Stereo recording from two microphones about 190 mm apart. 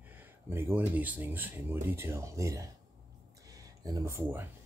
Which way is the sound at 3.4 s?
20° right (ahead or behind).